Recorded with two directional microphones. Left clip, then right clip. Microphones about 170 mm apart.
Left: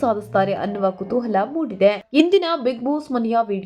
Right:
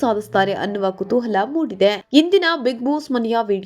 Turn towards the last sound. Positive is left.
turn(degrees=-35)  # may be behind; listen again after turning